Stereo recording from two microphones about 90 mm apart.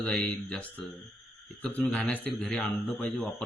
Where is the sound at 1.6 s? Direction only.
10° left (ahead or behind).